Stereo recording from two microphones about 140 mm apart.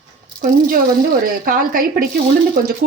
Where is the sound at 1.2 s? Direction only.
85° right.